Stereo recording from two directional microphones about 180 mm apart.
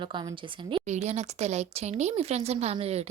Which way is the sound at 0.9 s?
40° right (ahead or behind).